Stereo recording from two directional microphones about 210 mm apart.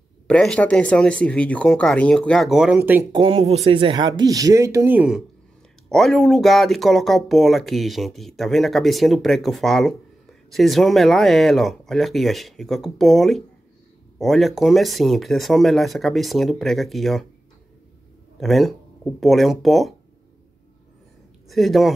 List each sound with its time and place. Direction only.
0.3 s speech: 5° left (ahead or behind)
3.1 s speech: 25° right (ahead or behind); by 17.3 s centre (ahead or behind)
18.4 s speech: centre (ahead or behind)
21.5 s speech: centre (ahead or behind)